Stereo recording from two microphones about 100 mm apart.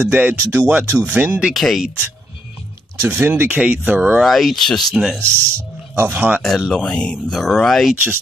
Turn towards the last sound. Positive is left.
turn(degrees=5)  # may be behind; listen again after turning